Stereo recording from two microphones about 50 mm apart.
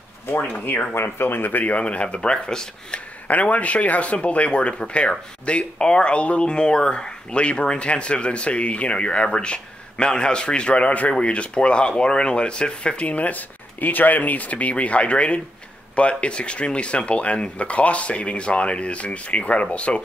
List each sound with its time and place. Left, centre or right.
0.9 s speech: left
1.6 s speech: left
3.3 s speech: left